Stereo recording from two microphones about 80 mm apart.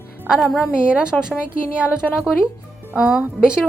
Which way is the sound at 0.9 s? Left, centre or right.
Centre.